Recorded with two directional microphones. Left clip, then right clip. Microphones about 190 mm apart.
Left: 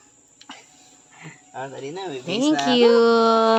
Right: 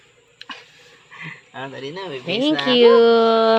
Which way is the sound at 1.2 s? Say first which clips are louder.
Right 2 dB; 15° left (ahead or behind).